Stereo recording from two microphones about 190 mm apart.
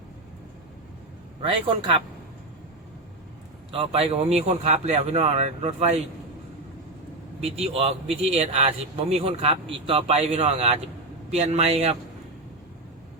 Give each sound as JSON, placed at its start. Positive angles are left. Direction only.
{"t": 1.4, "sound": "a man's voice", "side_deg": -30}
{"t": 3.7, "sound": "a man's voice", "side_deg": -30}
{"t": 7.4, "sound": "a man's voice", "side_deg": -30}